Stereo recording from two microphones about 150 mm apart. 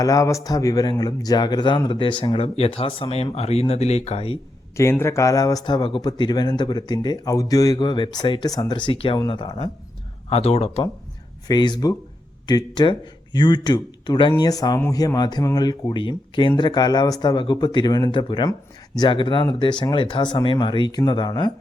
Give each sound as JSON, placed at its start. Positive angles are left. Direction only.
{"t": 0.0, "sound": "a man's voice", "side_deg": 20}
{"t": 4.8, "sound": "speech", "side_deg": 20}
{"t": 10.2, "sound": "speech", "side_deg": 45}
{"t": 11.4, "sound": "a man's voice", "side_deg": 30}